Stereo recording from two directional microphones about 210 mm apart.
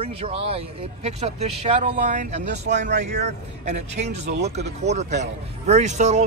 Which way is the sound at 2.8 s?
55° right (ahead or behind).